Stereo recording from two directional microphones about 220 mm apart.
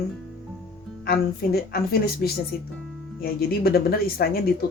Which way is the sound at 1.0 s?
45° left (ahead or behind).